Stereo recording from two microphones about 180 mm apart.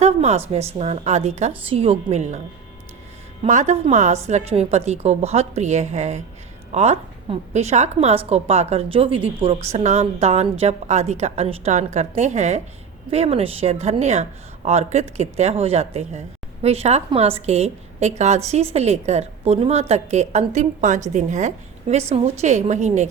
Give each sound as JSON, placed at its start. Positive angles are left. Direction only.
{"t": 0.0, "sound": "a woman's voice", "side_deg": -35}
{"t": 3.4, "sound": "a woman's voice", "side_deg": -40}